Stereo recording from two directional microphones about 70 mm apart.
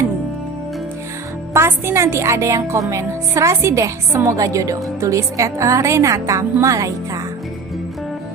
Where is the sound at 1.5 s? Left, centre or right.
Right.